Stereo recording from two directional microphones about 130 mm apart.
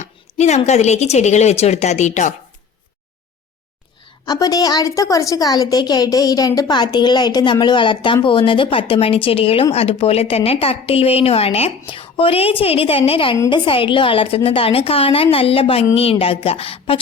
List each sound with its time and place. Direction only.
0.0 s a woman's voice: 60° left (ahead or behind)
4.3 s a woman's voice: 30° left (ahead or behind); by 17.0 s 45° left (ahead or behind)